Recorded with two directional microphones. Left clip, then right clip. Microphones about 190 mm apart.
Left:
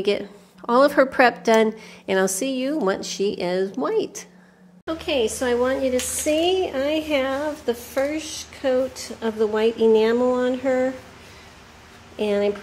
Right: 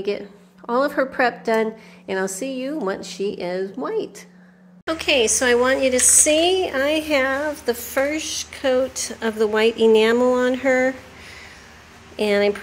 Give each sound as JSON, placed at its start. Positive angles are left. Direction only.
{"t": 0.0, "sound": "a woman's voice", "side_deg": 25}
{"t": 4.8, "sound": "speech", "side_deg": 0}
{"t": 12.2, "sound": "speech", "side_deg": 0}